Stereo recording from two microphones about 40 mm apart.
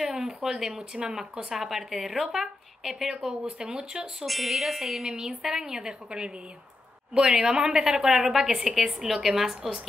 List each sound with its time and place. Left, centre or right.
0.0 s a woman's voice: centre
0.9 s speech: right
1.5 s a woman's voice: centre
3.1 s speech: centre
4.3 s a woman's voice: centre